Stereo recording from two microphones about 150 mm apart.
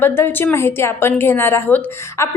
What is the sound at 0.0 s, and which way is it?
A woman's voice, 15° left (ahead or behind).